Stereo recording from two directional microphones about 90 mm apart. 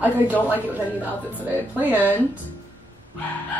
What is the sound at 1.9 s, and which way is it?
Speech, 20° left (ahead or behind).